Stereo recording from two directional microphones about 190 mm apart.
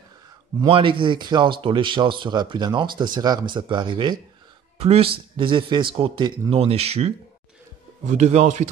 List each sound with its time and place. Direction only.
0.6 s a man's voice: 25° right (ahead or behind)